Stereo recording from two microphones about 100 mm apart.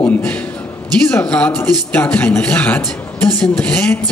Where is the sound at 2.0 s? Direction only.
15° left (ahead or behind).